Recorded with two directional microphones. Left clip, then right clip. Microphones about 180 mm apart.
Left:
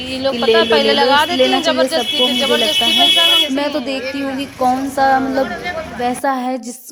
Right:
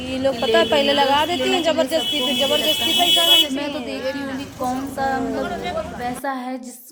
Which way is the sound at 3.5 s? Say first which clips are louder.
Left 7 dB; 35° left (ahead or behind).